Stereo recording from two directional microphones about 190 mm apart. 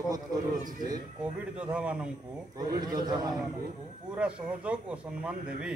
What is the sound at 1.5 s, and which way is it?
Speech, 5° right (ahead or behind).